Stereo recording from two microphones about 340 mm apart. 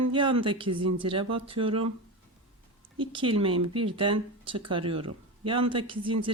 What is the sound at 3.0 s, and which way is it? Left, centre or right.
Speech, centre.